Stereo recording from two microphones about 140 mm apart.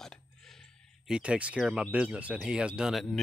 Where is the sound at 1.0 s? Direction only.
5° right (ahead or behind).